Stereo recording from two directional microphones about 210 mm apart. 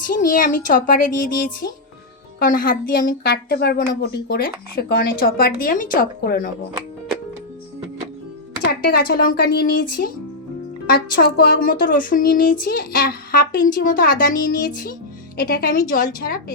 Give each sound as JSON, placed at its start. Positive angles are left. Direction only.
{"t": 0.0, "sound": "a woman's voice", "side_deg": 40}
{"t": 8.8, "sound": "speech", "side_deg": 45}
{"t": 11.1, "sound": "speech", "side_deg": 45}